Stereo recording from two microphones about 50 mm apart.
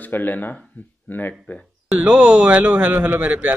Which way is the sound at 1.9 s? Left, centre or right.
Right.